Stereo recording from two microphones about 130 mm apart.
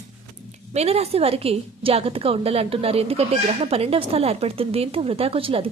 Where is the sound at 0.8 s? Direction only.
50° right (ahead or behind).